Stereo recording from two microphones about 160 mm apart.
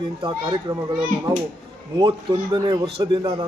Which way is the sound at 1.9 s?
25° right (ahead or behind).